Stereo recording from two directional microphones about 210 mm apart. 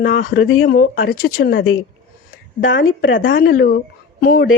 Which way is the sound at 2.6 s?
65° left (ahead or behind).